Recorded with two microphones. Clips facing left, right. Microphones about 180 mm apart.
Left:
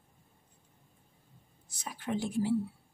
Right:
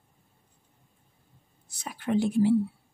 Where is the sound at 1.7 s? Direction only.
65° right (ahead or behind).